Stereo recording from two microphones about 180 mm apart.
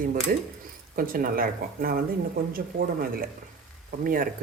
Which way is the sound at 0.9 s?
50° right (ahead or behind).